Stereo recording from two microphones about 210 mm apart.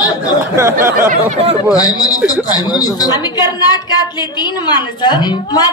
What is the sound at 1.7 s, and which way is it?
A woman's voice, 15° left (ahead or behind).